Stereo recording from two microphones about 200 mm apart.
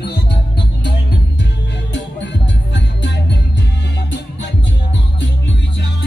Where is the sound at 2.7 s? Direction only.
60° left (ahead or behind).